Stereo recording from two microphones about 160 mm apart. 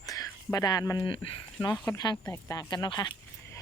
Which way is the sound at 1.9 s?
25° left (ahead or behind).